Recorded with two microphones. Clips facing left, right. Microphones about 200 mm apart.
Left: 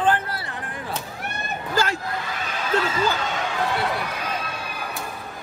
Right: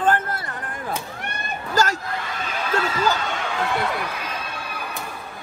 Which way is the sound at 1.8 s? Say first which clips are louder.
Right 3 dB; 45° right (ahead or behind).